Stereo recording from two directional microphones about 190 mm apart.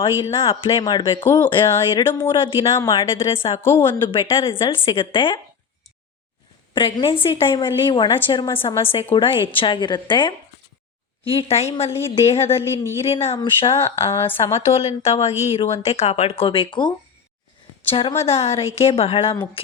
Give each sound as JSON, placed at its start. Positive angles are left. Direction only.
{"t": 0.0, "sound": "a woman's voice", "side_deg": 25}
{"t": 1.2, "sound": "a woman's voice", "side_deg": 10}
{"t": 3.2, "sound": "a woman's voice", "side_deg": 30}
{"t": 3.6, "sound": "speech", "side_deg": 10}
{"t": 4.1, "sound": "a woman's voice", "side_deg": 25}
{"t": 6.7, "sound": "a woman's voice", "side_deg": 25}
{"t": 17.9, "sound": "speech", "side_deg": 30}